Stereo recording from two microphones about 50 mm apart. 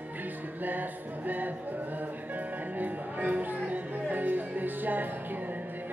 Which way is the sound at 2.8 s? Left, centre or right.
Right.